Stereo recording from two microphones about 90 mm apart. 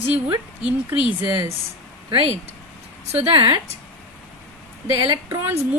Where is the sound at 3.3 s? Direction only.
65° right (ahead or behind).